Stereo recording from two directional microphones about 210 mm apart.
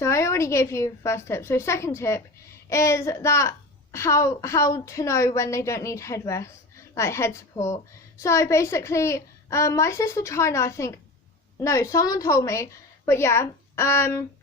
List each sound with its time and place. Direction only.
0.0 s a woman's voice: 15° left (ahead or behind)